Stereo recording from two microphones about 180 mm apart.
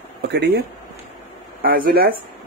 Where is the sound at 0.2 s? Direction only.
65° right (ahead or behind).